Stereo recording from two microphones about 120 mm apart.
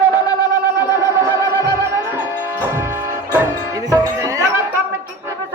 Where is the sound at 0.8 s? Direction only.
20° right (ahead or behind).